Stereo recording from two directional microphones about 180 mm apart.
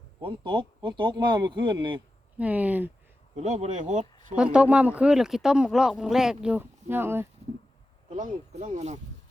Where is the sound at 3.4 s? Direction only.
35° right (ahead or behind).